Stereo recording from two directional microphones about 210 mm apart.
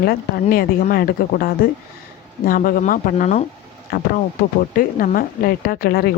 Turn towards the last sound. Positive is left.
turn(degrees=45)  # may be behind; listen again after turning